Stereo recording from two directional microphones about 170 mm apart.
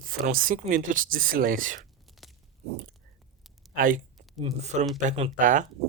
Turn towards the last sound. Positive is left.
turn(degrees=-50)  # may be behind; listen again after turning